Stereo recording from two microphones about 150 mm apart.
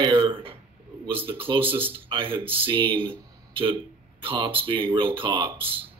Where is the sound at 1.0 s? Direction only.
35° right (ahead or behind).